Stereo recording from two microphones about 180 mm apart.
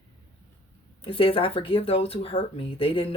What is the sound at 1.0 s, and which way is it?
Speech, 30° left (ahead or behind).